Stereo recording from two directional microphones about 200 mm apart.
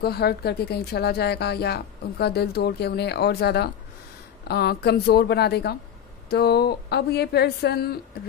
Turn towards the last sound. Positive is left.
turn(degrees=50)  # may be behind; listen again after turning